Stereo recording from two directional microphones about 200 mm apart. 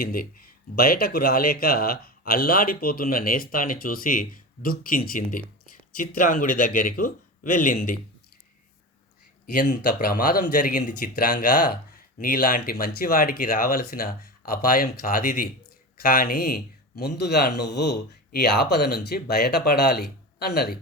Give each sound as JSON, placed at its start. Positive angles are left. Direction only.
{"t": 0.0, "sound": "speech", "side_deg": 45}
{"t": 9.6, "sound": "speech", "side_deg": 45}